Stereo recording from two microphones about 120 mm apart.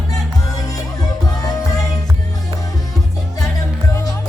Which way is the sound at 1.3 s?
30° left (ahead or behind).